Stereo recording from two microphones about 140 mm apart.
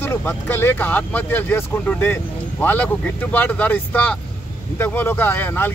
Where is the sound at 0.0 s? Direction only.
15° left (ahead or behind).